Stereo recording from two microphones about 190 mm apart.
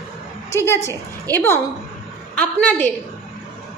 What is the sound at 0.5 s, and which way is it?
A woman's voice, 15° left (ahead or behind).